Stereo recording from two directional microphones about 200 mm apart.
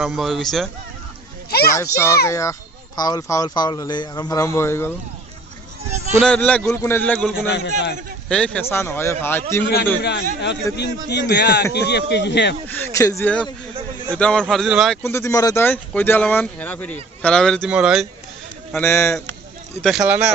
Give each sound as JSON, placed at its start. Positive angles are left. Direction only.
{"t": 0.0, "sound": "a man's voice", "side_deg": 0}
{"t": 1.5, "sound": "a sound", "side_deg": 50}
{"t": 1.7, "sound": "speech", "side_deg": 15}
{"t": 6.1, "sound": "a man's voice", "side_deg": 5}
{"t": 10.0, "sound": "a man's voice", "side_deg": 60}
{"t": 12.6, "sound": "a man's voice", "side_deg": 10}
{"t": 15.0, "sound": "speech", "side_deg": 15}
{"t": 18.8, "sound": "speech", "side_deg": 15}
{"t": 19.8, "sound": "a man's voice", "side_deg": 0}